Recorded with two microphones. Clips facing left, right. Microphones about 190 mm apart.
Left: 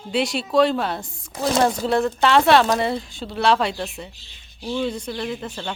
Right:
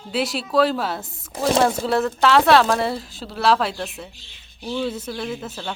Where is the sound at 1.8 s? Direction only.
5° right (ahead or behind).